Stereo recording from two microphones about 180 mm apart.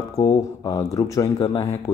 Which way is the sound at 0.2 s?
20° left (ahead or behind).